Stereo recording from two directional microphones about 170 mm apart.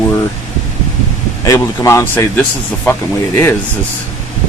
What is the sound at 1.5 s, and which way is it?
Speech, 20° left (ahead or behind).